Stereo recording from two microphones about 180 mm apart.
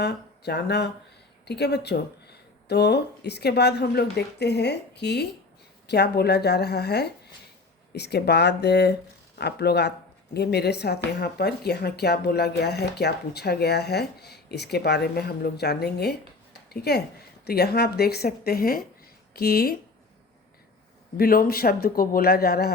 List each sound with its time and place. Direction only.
0.0 s speech: 65° left (ahead or behind)
21.2 s speech: 55° left (ahead or behind)